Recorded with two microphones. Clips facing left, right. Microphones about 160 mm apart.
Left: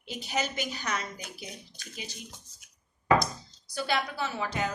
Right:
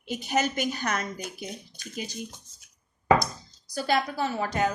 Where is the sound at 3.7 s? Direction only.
40° right (ahead or behind).